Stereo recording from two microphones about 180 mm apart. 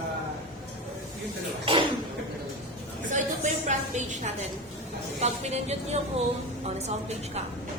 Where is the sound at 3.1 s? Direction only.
40° right (ahead or behind).